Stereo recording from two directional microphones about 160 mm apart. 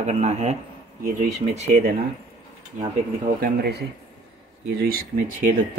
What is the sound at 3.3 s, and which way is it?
Speech, 80° right.